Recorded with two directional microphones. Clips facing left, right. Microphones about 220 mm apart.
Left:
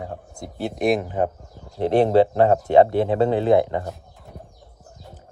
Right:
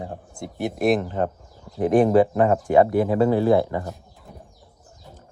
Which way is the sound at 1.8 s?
25° left (ahead or behind).